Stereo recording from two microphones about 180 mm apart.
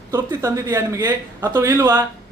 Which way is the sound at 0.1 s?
15° right (ahead or behind).